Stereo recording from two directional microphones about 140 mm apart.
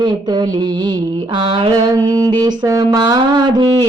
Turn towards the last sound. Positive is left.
turn(degrees=-30)  # may be behind; listen again after turning